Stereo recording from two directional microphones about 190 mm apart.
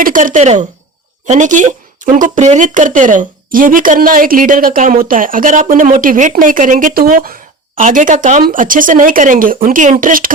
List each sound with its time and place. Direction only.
0.0 s a woman's voice: 45° right (ahead or behind)